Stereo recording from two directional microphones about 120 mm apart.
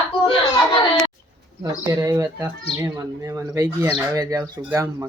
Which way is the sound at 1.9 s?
25° right (ahead or behind).